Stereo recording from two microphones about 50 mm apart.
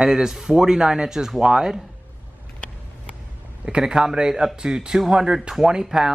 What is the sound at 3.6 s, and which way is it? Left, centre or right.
Speech, centre.